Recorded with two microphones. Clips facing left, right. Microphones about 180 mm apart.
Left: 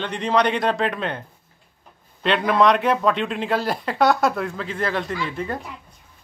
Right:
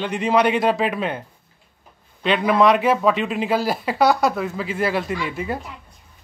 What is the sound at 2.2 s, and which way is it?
Speech, 5° right (ahead or behind).